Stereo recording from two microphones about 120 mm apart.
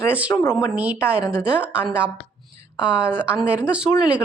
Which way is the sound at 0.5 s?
10° right (ahead or behind).